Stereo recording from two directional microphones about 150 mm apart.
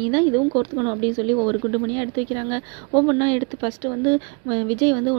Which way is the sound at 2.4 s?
25° right (ahead or behind).